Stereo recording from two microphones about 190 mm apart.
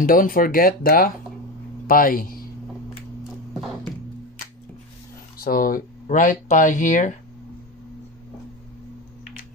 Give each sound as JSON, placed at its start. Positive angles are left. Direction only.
{"t": 0.0, "sound": "a man's voice", "side_deg": 50}
{"t": 5.4, "sound": "speech", "side_deg": 50}